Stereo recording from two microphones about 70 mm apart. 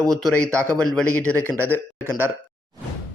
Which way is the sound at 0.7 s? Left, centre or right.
Centre.